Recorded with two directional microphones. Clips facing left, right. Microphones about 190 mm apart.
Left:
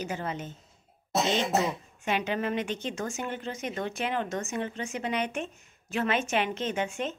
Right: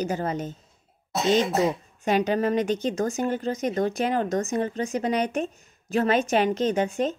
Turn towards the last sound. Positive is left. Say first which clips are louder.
# right 7 dB
turn(degrees=-35)  # may be behind; listen again after turning